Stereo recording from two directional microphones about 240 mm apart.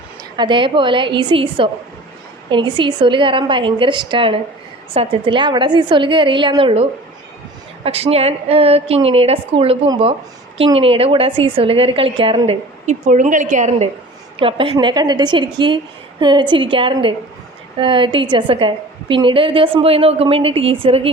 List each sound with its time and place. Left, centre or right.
0.3 s a woman's voice: centre
7.9 s a woman's voice: right